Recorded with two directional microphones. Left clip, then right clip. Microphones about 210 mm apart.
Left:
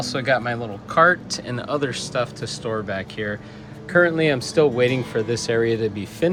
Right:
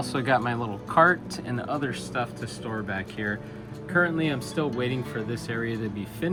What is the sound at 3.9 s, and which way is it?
Speech, 20° left (ahead or behind).